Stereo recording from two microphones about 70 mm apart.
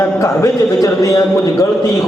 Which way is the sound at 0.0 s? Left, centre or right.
Left.